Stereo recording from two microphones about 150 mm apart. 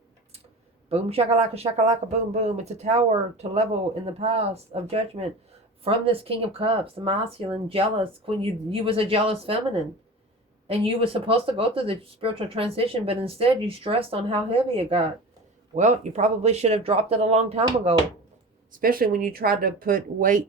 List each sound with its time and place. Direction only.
0.9 s speech: 45° right (ahead or behind)
10.7 s speech: 40° right (ahead or behind)
15.7 s speech: 50° right (ahead or behind)
18.7 s speech: 75° right (ahead or behind)